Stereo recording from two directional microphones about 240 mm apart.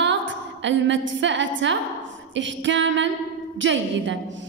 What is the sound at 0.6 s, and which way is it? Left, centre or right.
A woman's voice, right.